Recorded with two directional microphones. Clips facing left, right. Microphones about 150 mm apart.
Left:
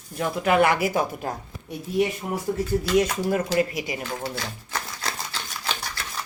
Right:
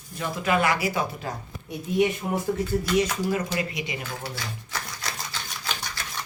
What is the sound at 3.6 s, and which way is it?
Speech, 40° left (ahead or behind).